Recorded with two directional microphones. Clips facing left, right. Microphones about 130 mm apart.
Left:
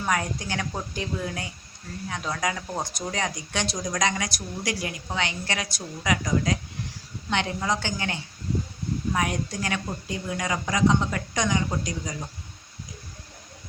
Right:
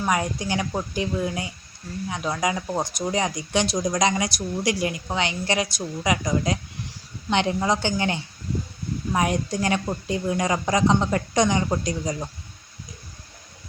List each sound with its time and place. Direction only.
0.0 s a woman's voice: 15° right (ahead or behind); by 12.1 s 30° right (ahead or behind)